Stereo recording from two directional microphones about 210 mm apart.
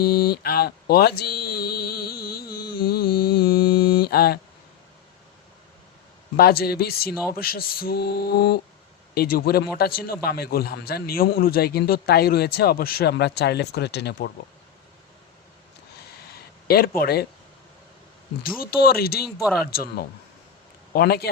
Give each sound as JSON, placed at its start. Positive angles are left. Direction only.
{"t": 0.0, "sound": "a sound", "side_deg": 45}
{"t": 6.3, "sound": "a man's voice", "side_deg": 45}
{"t": 16.6, "sound": "a man's voice", "side_deg": 45}
{"t": 18.4, "sound": "a man's voice", "side_deg": 45}
{"t": 19.4, "sound": "speech", "side_deg": 0}
{"t": 20.9, "sound": "a man's voice", "side_deg": 50}